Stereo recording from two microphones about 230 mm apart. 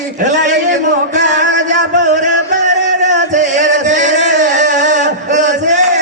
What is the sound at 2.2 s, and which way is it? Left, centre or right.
Music, right.